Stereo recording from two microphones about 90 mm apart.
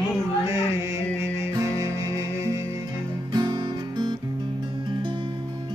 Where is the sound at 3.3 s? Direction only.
45° right (ahead or behind).